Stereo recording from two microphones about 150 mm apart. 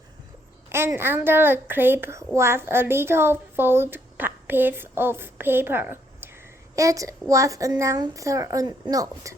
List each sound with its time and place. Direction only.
0.7 s a woman's voice: 15° right (ahead or behind)